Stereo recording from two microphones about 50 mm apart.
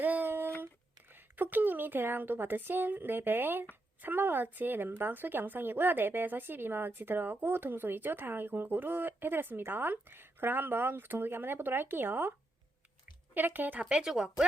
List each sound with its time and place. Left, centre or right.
0.0 s a sound: right
1.1 s a woman's voice: right
13.3 s speech: right
13.8 s speech: centre